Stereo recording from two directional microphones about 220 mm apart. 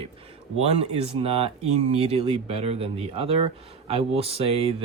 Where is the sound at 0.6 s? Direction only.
30° right (ahead or behind).